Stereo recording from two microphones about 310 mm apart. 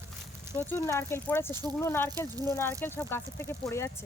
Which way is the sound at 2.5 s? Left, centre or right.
Centre.